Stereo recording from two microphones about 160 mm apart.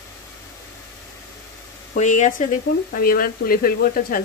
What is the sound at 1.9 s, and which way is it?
Speech, 50° left (ahead or behind).